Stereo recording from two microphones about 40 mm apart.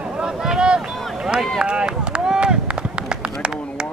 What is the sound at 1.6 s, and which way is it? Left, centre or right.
Run, right.